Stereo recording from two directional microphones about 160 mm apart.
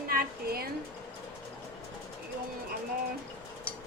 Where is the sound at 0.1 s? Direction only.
70° right (ahead or behind).